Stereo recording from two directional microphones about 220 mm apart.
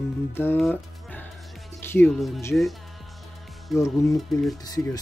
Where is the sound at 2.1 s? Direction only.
Centre (ahead or behind).